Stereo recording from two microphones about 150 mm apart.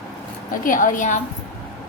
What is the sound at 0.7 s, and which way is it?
Speech, 65° left (ahead or behind).